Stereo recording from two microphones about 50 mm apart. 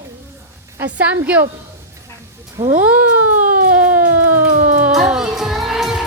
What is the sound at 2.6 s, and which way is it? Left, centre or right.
Speech, right.